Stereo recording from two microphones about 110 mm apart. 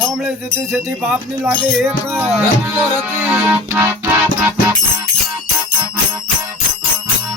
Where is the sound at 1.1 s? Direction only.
10° right (ahead or behind).